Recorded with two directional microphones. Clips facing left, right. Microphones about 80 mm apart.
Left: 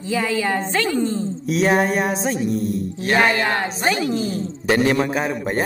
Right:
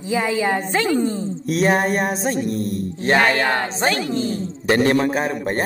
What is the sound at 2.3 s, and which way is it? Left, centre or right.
Speech, right.